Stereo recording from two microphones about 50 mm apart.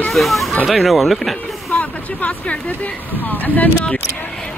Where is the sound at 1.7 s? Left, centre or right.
Left.